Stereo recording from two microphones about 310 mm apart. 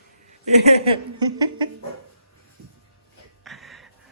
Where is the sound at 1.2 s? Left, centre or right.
Centre.